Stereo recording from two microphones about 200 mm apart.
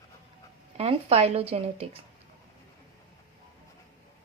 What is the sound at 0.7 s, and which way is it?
Speech, 30° right (ahead or behind).